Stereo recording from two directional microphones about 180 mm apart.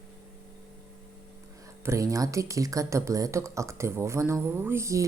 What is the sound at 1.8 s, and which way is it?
Speech, 15° right (ahead or behind).